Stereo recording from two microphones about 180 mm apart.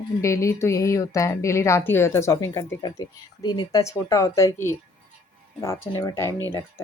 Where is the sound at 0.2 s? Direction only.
15° left (ahead or behind).